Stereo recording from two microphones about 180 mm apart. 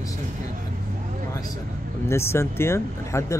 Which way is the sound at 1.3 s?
20° left (ahead or behind).